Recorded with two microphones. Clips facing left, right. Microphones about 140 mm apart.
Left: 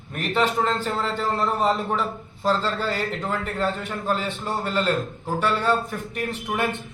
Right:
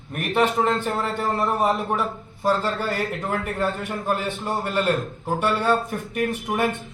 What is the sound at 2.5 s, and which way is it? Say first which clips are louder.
Speech: right 1 dB; 15° right (ahead or behind).